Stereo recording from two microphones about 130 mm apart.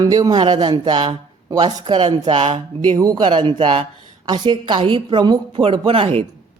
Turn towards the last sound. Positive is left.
turn(degrees=-50)  # may be behind; listen again after turning